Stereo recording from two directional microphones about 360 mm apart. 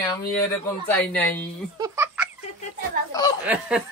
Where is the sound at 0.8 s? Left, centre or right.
Centre.